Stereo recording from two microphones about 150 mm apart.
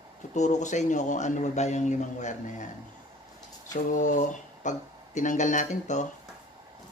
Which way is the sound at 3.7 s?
60° left (ahead or behind).